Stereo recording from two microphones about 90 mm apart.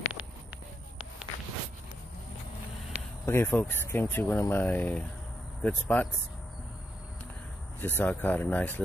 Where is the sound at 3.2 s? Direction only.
25° left (ahead or behind).